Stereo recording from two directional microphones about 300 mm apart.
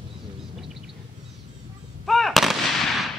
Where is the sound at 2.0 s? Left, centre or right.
Centre.